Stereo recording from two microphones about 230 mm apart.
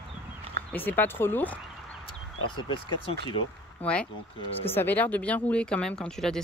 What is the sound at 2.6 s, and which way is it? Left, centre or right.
Speech, left.